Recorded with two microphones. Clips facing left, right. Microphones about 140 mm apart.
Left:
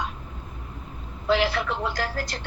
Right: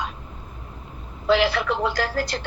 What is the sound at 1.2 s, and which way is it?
A man's voice, 90° right.